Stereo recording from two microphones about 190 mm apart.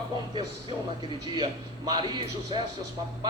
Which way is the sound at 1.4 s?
20° right (ahead or behind).